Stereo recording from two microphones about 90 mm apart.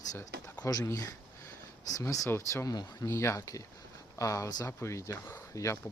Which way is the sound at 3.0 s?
35° left (ahead or behind).